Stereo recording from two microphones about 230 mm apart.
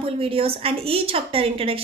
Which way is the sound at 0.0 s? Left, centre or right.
Right.